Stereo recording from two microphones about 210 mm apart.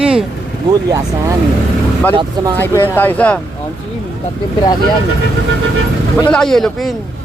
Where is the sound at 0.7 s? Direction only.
15° right (ahead or behind).